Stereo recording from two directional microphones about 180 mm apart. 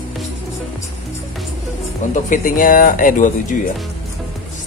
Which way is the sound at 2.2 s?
50° left (ahead or behind).